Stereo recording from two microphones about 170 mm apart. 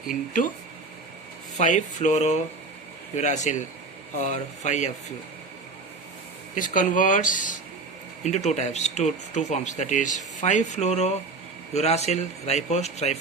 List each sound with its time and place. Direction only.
0.1 s speech: 50° left (ahead or behind)
1.5 s speech: 45° left (ahead or behind)
6.6 s speech: 50° left (ahead or behind)